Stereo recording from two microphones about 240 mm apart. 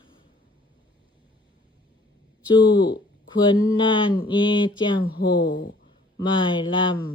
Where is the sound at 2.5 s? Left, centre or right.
Centre.